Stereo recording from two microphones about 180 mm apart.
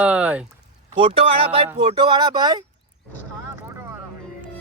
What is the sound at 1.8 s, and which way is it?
Speech, 30° right (ahead or behind).